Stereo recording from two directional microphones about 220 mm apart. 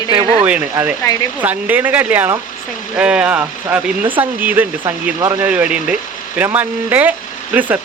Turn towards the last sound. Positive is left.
turn(degrees=-5)  # may be behind; listen again after turning